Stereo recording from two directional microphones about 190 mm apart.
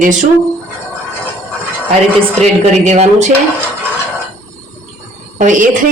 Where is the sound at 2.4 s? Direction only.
40° right (ahead or behind).